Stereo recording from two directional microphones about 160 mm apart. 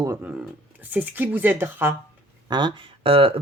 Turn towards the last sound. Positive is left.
turn(degrees=-35)  # may be behind; listen again after turning